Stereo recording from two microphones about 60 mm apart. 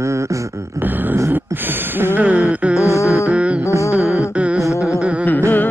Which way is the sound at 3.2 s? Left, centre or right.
Right.